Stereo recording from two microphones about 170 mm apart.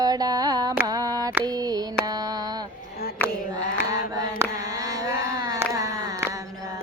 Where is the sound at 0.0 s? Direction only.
25° right (ahead or behind).